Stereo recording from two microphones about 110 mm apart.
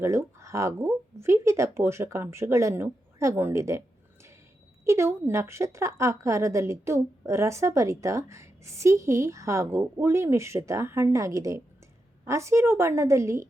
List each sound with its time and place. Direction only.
0.0 s a woman's voice: 25° right (ahead or behind)